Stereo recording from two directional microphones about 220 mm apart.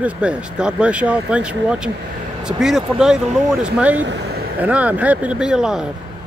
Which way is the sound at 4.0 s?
55° right (ahead or behind).